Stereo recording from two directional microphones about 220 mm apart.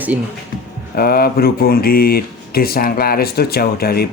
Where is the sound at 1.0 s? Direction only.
45° left (ahead or behind).